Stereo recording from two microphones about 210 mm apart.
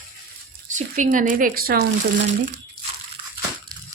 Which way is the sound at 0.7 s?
40° right (ahead or behind).